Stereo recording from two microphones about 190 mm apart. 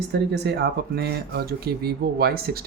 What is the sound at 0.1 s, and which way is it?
Speech, 60° right (ahead or behind).